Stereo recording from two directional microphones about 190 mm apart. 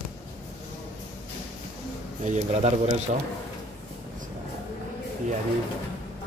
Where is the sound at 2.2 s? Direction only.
35° right (ahead or behind).